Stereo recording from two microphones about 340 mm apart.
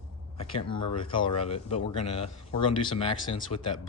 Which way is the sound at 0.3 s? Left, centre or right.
Centre.